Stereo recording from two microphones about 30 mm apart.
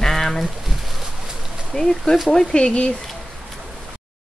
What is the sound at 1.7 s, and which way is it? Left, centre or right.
Speech, left.